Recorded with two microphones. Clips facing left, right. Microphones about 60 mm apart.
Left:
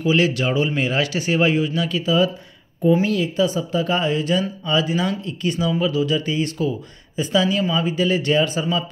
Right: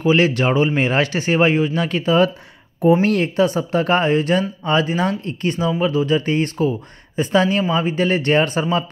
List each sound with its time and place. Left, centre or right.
0.0 s speech: right